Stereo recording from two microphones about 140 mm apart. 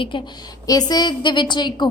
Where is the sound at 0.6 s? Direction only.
30° left (ahead or behind).